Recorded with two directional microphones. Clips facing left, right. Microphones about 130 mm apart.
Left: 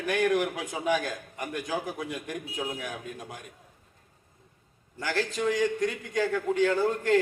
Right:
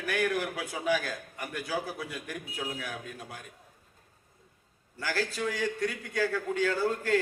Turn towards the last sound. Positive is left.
turn(degrees=20)  # may be behind; listen again after turning